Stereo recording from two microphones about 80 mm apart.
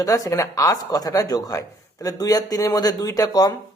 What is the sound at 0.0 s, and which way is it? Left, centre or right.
Speech, left.